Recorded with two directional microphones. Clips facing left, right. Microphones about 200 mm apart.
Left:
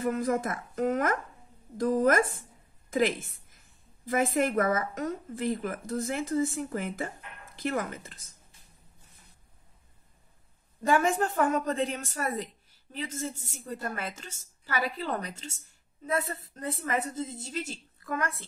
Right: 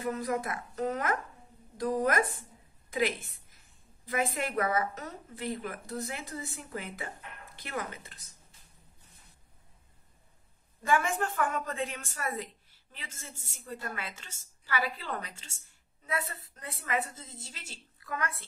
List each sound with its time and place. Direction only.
0.0 s speech: 45° left (ahead or behind)
4.0 s speech: 45° left (ahead or behind)
10.8 s a woman's voice: 40° left (ahead or behind)